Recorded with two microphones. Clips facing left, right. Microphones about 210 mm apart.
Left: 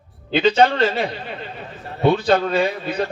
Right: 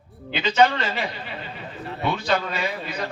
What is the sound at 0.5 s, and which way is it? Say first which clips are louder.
Speech: right 2 dB; 35° left (ahead or behind).